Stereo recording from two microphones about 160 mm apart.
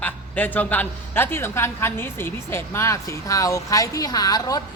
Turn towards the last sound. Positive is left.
turn(degrees=25)  # may be behind; listen again after turning